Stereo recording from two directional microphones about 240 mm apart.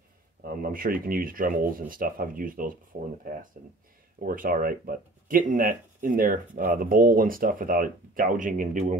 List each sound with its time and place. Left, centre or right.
0.4 s speech: right